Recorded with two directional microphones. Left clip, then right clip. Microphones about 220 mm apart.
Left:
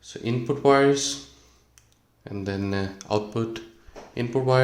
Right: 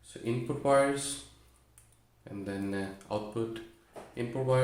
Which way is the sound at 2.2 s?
50° left (ahead or behind).